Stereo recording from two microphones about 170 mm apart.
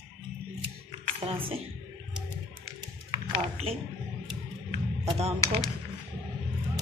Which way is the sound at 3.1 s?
35° right (ahead or behind).